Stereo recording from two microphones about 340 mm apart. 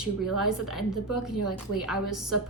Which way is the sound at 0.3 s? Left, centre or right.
Centre.